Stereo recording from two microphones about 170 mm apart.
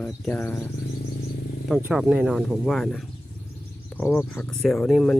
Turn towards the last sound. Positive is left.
turn(degrees=5)  # may be behind; listen again after turning